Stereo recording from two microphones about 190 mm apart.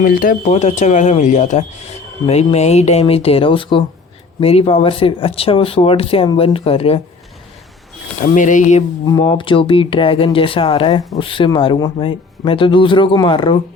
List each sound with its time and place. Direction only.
0.0 s speech: 45° left (ahead or behind); by 7.0 s 30° left (ahead or behind)
8.2 s speech: 40° left (ahead or behind)
9.0 s speech: 25° left (ahead or behind)